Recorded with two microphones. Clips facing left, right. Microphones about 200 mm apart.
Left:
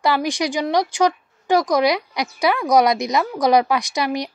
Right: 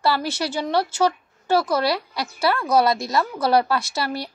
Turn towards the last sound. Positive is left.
turn(degrees=15)  # may be behind; listen again after turning